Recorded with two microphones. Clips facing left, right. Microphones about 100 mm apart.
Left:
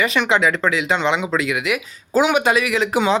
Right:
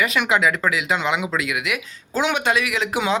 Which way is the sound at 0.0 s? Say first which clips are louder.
Left 2 dB; centre (ahead or behind).